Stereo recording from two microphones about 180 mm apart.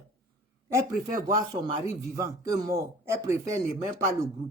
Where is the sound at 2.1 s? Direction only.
20° right (ahead or behind).